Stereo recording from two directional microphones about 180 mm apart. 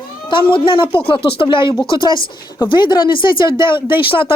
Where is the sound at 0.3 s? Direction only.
30° left (ahead or behind).